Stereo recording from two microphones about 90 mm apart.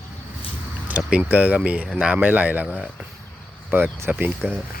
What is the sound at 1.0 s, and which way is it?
Speech, 10° right (ahead or behind).